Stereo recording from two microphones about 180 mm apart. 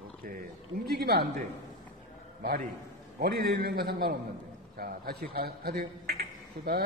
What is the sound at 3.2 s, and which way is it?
A man's voice, 60° right (ahead or behind).